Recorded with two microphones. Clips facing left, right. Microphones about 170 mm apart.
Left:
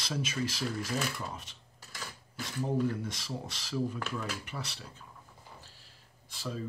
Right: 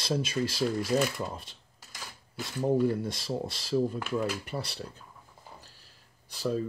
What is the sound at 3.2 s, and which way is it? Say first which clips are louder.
Speech: right 7 dB; 35° right (ahead or behind).